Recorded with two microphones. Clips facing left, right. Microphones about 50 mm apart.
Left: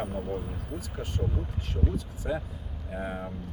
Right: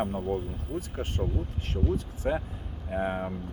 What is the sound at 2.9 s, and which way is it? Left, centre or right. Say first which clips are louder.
Speech: right 5 dB; right.